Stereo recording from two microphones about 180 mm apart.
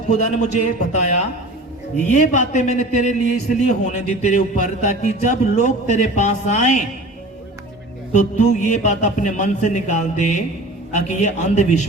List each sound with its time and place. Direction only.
0.2 s a man's voice: 40° left (ahead or behind)
8.1 s a man's voice: 40° left (ahead or behind)